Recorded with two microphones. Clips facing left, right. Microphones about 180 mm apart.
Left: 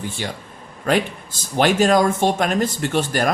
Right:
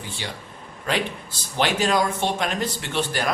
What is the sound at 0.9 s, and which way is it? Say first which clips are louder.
Speech: left 6 dB; 50° left (ahead or behind).